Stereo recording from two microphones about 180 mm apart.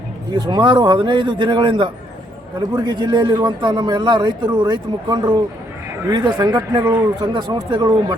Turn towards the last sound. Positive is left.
turn(degrees=-25)  # may be behind; listen again after turning